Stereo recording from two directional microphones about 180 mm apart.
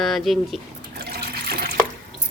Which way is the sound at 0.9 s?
60° right (ahead or behind).